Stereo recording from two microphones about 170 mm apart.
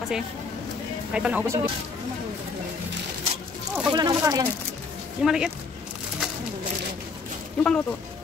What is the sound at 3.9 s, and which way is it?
Speech, 25° right (ahead or behind).